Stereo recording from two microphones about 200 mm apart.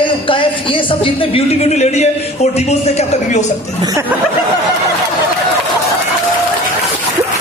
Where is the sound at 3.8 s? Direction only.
15° right (ahead or behind).